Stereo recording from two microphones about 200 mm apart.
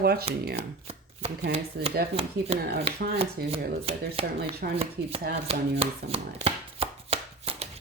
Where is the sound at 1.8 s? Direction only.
55° right (ahead or behind).